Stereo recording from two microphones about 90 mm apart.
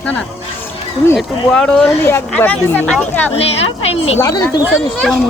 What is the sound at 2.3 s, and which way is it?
Speech, 20° left (ahead or behind).